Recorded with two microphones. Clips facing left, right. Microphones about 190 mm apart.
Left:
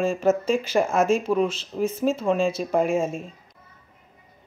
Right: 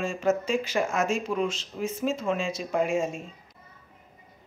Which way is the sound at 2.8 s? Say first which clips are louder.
Left 3 dB; 55° left (ahead or behind).